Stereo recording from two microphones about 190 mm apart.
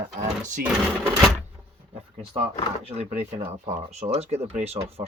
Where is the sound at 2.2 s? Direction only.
30° right (ahead or behind).